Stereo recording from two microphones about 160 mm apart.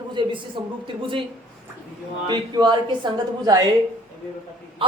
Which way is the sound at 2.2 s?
25° right (ahead or behind).